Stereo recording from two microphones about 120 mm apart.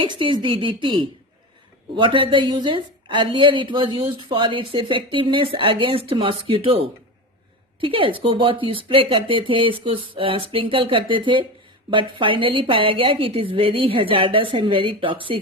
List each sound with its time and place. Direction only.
0.0 s a woman's voice: 45° right (ahead or behind)